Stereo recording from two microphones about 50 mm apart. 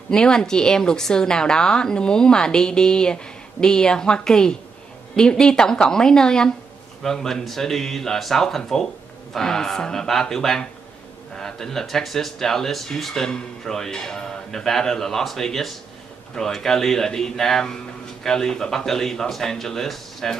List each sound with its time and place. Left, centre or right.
0.1 s speech: centre